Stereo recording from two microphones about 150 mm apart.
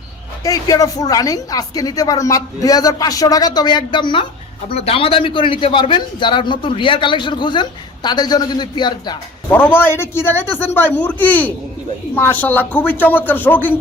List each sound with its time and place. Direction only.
0.4 s a woman's voice: 25° left (ahead or behind)
9.5 s a man's voice: 10° left (ahead or behind)